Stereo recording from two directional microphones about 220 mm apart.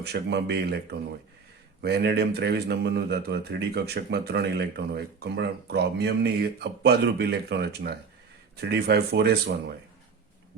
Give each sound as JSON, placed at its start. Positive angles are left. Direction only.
{"t": 0.0, "sound": "speech", "side_deg": -50}